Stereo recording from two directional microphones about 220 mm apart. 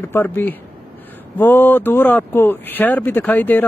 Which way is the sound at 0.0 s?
10° left (ahead or behind).